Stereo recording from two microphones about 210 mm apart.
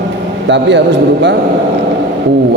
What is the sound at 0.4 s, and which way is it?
Speech, 55° right (ahead or behind).